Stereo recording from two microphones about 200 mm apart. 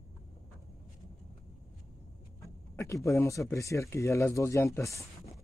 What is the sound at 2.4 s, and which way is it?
Speech, 15° left (ahead or behind).